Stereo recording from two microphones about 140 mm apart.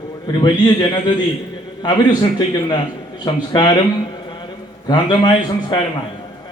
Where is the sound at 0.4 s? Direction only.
30° left (ahead or behind).